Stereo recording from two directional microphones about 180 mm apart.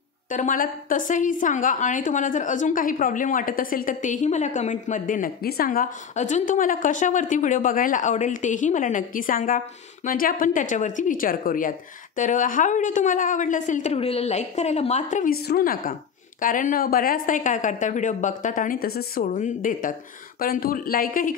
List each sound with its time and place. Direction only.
0.3 s a woman's voice: 45° left (ahead or behind)